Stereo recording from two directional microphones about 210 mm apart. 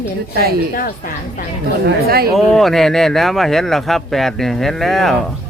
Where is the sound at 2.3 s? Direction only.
Centre (ahead or behind).